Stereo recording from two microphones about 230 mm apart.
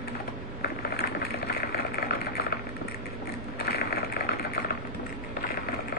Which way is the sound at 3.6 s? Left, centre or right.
Left.